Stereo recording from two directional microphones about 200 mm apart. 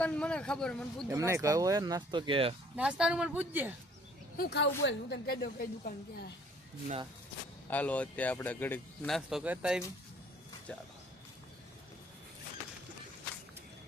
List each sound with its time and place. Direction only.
0.0 s a man's voice: 5° left (ahead or behind)
1.0 s speech: 15° right (ahead or behind)
2.7 s speech: 5° right (ahead or behind)
4.4 s a woman's voice: 55° left (ahead or behind)
7.7 s speech: 5° left (ahead or behind)